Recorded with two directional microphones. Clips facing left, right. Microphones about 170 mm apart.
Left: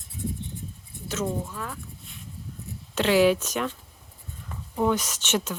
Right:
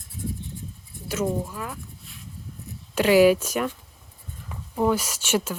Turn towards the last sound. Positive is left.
turn(degrees=-10)  # may be behind; listen again after turning